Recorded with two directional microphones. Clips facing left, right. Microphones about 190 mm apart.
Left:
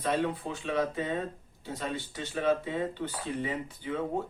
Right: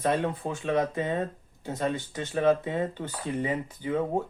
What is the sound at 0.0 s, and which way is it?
Speech, 45° right (ahead or behind).